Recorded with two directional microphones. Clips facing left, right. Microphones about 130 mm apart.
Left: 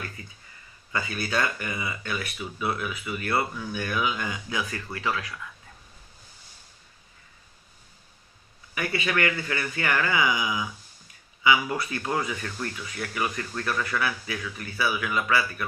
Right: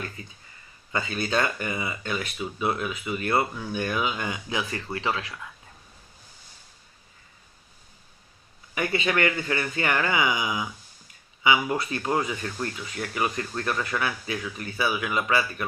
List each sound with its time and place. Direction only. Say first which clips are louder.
0.2 s speech: right 2 dB; 25° right (ahead or behind)
8.7 s speech: right 2 dB; 20° right (ahead or behind)